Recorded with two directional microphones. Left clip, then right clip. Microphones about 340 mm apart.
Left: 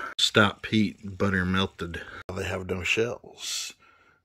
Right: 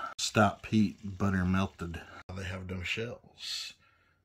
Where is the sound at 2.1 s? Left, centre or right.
Centre.